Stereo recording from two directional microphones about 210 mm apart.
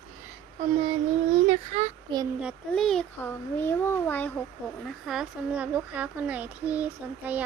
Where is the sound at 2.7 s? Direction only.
5° left (ahead or behind).